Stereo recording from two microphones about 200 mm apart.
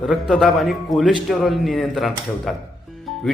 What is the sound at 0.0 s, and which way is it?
Speech, centre (ahead or behind).